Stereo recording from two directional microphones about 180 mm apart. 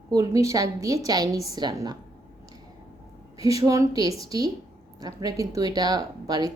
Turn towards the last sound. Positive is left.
turn(degrees=-20)  # may be behind; listen again after turning